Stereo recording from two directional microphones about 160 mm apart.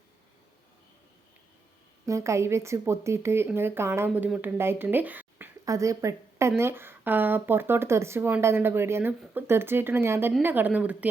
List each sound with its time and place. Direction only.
2.0 s speech: 20° right (ahead or behind)